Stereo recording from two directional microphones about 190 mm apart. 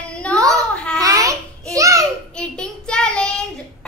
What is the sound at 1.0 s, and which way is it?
Babbling, 15° right (ahead or behind).